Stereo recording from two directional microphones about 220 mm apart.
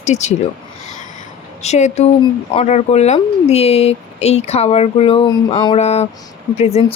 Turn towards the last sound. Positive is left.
turn(degrees=30)  # may be behind; listen again after turning